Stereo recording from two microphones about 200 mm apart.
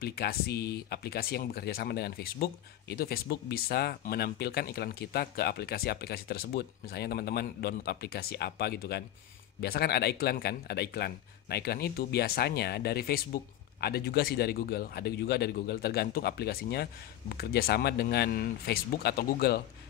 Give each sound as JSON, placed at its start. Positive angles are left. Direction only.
{"t": 0.0, "sound": "speech", "side_deg": 50}